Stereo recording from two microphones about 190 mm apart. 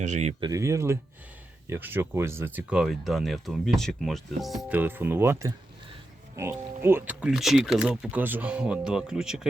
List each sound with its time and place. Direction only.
0.0 s speech: 35° right (ahead or behind)
0.3 s speech: 20° right (ahead or behind); by 9.5 s 5° right (ahead or behind)